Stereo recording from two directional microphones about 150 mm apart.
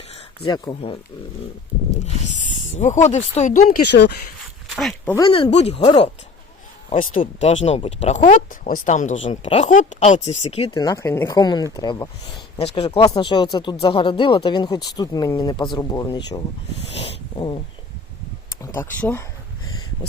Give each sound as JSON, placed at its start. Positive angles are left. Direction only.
{"t": 0.1, "sound": "speech", "side_deg": 30}
{"t": 2.7, "sound": "speech", "side_deg": 50}
{"t": 4.7, "sound": "speech", "side_deg": 0}
{"t": 5.2, "sound": "speech", "side_deg": 35}
{"t": 6.9, "sound": "speech", "side_deg": 60}
{"t": 9.2, "sound": "speech", "side_deg": 40}
{"t": 9.6, "sound": "speech", "side_deg": 55}
{"t": 10.7, "sound": "speech", "side_deg": 25}
{"t": 12.5, "sound": "speech", "side_deg": 40}
{"t": 13.0, "sound": "speech", "side_deg": 25}
{"t": 18.6, "sound": "speech", "side_deg": 15}